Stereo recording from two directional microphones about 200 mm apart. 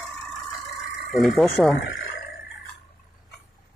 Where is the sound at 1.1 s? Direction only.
Centre (ahead or behind).